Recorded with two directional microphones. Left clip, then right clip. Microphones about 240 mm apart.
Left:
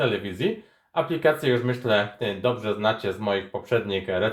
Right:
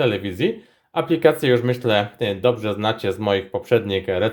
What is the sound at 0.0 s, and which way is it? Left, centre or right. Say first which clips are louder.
Speech: right 4 dB; right.